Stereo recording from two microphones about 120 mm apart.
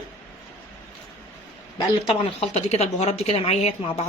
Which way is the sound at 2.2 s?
60° left (ahead or behind).